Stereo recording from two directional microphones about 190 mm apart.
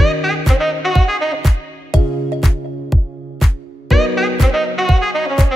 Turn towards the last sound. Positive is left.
turn(degrees=0)  # may be behind; listen again after turning